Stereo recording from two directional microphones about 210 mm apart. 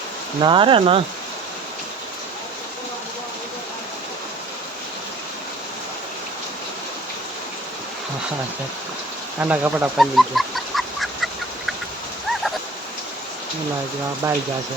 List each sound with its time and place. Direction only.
0.4 s speech: 25° right (ahead or behind)
9.4 s duck: 10° right (ahead or behind)
14.2 s speech: 15° right (ahead or behind)